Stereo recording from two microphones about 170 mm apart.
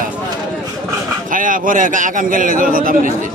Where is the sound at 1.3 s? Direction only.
50° right (ahead or behind).